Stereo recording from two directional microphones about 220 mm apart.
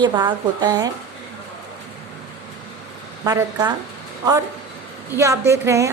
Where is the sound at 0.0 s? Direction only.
20° right (ahead or behind).